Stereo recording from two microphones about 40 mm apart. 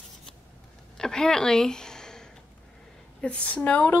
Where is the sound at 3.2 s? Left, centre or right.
Left.